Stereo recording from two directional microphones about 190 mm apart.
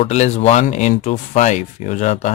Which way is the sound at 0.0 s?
35° left (ahead or behind).